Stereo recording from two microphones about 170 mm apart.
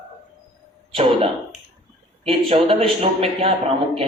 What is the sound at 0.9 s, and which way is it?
A man's voice, 35° right (ahead or behind).